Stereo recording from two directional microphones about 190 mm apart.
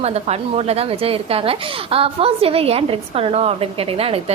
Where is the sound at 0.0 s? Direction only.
35° right (ahead or behind).